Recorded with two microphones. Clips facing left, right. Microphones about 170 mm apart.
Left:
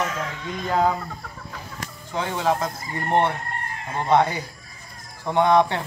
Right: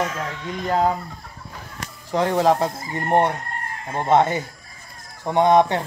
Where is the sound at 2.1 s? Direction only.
40° right (ahead or behind).